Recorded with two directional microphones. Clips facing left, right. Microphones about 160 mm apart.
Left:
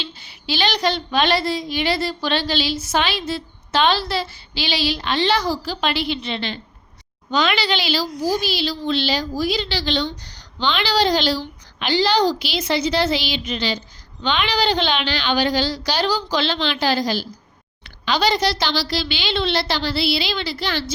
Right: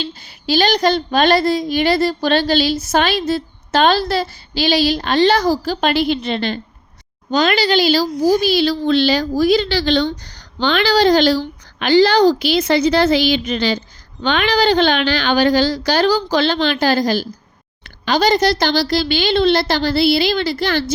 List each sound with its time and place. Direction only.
0.0 s a woman's voice: 40° right (ahead or behind)